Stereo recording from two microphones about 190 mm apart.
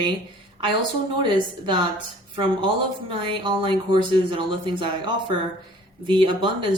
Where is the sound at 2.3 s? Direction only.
25° right (ahead or behind).